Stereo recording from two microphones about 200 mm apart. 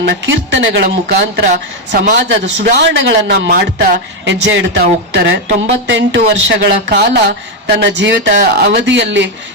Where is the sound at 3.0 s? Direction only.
65° right (ahead or behind).